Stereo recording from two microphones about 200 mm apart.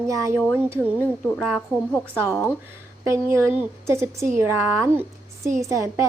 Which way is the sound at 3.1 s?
15° right (ahead or behind).